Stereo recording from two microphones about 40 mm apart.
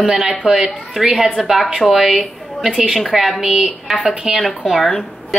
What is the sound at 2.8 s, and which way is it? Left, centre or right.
Speech, centre.